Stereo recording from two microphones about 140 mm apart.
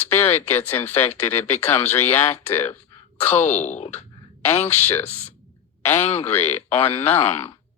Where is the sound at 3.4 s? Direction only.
55° left (ahead or behind).